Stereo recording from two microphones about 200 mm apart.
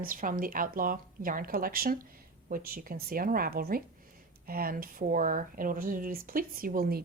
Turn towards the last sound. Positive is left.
turn(degrees=-50)  # may be behind; listen again after turning